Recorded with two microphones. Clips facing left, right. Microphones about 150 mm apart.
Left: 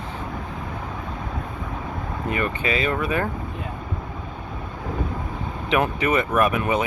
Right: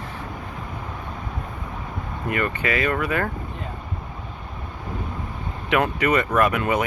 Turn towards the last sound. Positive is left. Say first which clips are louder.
# even
turn(degrees=20)  # may be behind; listen again after turning